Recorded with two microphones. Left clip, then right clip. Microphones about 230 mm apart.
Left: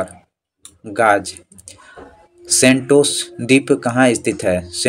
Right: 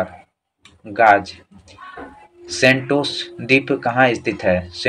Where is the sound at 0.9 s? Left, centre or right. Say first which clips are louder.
Right 2 dB; left.